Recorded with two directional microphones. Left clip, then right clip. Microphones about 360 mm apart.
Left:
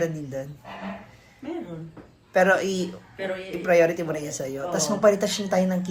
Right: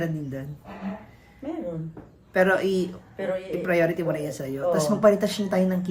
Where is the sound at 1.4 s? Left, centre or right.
Right.